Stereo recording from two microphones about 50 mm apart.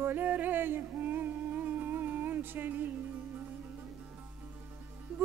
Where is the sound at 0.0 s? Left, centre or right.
Right.